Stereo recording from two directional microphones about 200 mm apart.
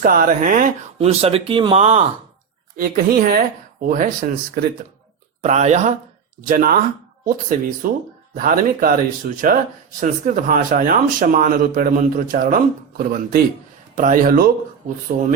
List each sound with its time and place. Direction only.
0.0 s speech: 45° right (ahead or behind)
2.7 s speech: 45° right (ahead or behind)